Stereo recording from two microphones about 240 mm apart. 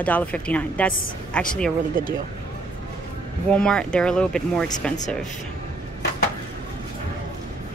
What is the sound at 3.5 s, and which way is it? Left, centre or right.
A woman's voice, centre.